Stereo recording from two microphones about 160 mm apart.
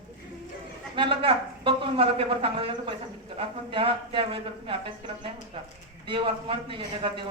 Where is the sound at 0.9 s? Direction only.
35° right (ahead or behind).